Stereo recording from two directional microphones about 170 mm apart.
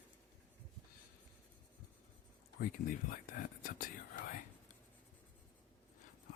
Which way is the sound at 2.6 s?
60° left (ahead or behind).